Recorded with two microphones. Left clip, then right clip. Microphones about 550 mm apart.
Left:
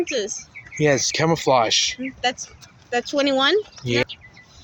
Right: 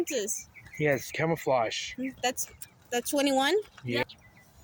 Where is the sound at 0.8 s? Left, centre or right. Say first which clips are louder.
Left 9 dB; right.